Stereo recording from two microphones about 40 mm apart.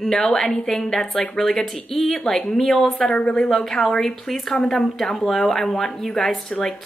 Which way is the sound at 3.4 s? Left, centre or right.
Centre.